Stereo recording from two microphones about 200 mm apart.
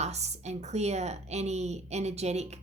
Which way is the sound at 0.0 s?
35° right (ahead or behind).